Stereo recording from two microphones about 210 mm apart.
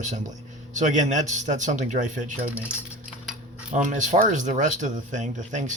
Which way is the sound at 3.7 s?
35° right (ahead or behind).